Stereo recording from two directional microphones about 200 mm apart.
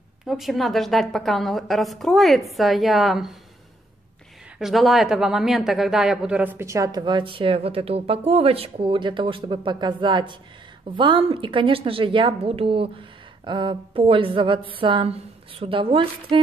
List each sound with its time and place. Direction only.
0.3 s a woman's voice: centre (ahead or behind)
4.6 s a woman's voice: centre (ahead or behind); by 16.3 s 25° right (ahead or behind)